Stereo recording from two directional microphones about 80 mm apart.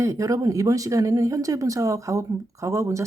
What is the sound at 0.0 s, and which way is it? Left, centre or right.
Speech, right.